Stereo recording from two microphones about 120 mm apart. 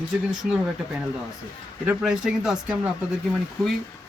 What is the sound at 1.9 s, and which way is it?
Speech, 5° right (ahead or behind).